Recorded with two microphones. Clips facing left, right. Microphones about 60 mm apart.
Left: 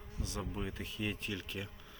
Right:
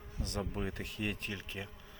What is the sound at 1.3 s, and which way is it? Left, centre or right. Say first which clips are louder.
Speech: left 1 dB; right.